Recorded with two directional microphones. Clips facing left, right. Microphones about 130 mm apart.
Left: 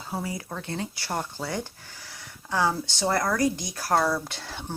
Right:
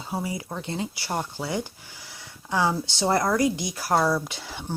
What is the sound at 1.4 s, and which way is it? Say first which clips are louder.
Speech: right 2 dB; 10° right (ahead or behind).